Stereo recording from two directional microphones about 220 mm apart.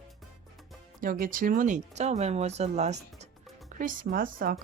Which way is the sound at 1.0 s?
40° right (ahead or behind).